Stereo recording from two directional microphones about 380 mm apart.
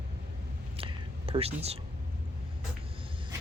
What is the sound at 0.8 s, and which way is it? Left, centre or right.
Whispering, centre.